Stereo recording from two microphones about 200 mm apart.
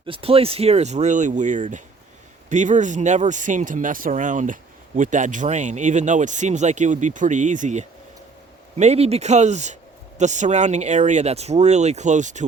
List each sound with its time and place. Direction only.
0.0 s speech: 25° right (ahead or behind)